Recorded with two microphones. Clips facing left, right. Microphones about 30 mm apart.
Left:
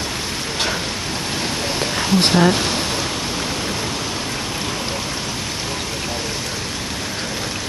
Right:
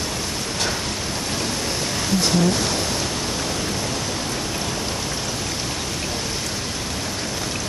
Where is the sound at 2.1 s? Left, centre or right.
Left.